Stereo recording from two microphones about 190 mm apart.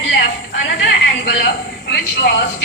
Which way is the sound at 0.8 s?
60° left (ahead or behind).